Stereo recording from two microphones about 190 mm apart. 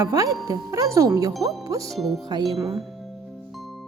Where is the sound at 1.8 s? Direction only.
Centre (ahead or behind).